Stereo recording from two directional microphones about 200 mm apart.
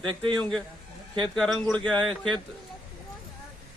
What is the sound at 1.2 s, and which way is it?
Speech, 5° left (ahead or behind).